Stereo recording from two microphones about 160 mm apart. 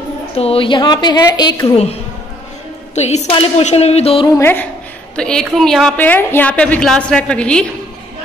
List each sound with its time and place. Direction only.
0.4 s a woman's voice: 35° left (ahead or behind)
2.9 s a woman's voice: 45° left (ahead or behind)
4.4 s a woman's voice: 10° left (ahead or behind)